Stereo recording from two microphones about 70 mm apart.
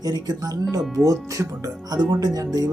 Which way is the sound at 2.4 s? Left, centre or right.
Right.